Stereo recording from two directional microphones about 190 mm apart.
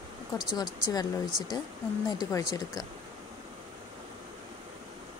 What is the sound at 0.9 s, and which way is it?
Speech, 20° left (ahead or behind).